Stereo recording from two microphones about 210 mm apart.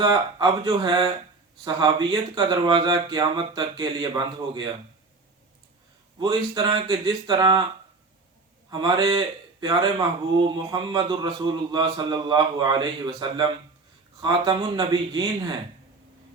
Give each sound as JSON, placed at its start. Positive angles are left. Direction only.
{"t": 0.0, "sound": "a man's voice", "side_deg": -20}
{"t": 6.1, "sound": "a man's voice", "side_deg": -20}
{"t": 8.7, "sound": "a man's voice", "side_deg": -20}